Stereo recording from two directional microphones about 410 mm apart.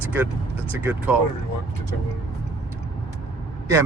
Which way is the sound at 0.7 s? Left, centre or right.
Centre.